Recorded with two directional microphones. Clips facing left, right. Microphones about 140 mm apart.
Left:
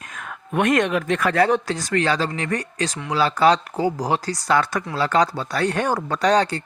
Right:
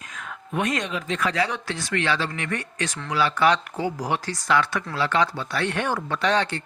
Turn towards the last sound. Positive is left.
turn(degrees=40)  # may be behind; listen again after turning